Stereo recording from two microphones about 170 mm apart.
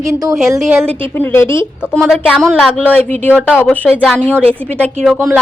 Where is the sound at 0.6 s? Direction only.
5° right (ahead or behind).